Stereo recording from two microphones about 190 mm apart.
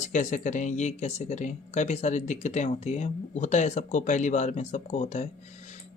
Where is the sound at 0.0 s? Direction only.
40° left (ahead or behind).